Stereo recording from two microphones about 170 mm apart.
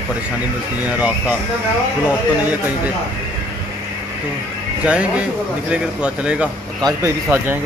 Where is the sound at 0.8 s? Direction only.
10° right (ahead or behind).